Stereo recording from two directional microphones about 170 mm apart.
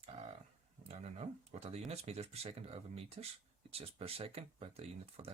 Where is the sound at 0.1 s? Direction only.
40° right (ahead or behind).